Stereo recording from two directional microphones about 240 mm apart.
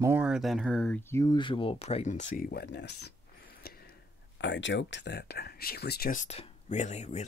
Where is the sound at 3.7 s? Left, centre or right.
Left.